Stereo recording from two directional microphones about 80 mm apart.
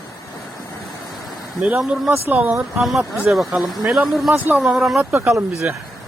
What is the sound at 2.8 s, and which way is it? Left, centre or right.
Speech, centre.